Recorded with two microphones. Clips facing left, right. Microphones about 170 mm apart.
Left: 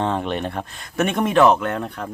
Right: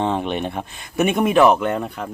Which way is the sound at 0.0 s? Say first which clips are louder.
Right 1 dB; 10° right (ahead or behind).